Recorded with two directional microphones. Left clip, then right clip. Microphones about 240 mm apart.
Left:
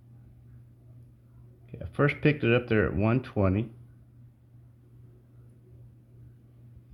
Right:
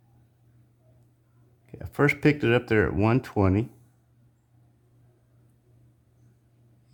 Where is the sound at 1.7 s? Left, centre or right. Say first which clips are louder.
Right 3 dB; right.